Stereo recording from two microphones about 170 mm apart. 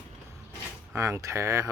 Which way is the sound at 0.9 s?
15° right (ahead or behind).